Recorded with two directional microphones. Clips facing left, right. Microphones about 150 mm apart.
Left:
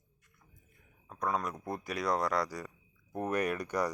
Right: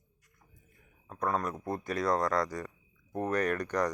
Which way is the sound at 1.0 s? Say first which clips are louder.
Right 2 dB; centre (ahead or behind).